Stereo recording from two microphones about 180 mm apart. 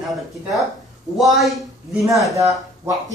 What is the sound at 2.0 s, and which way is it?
Speech, 15° right (ahead or behind).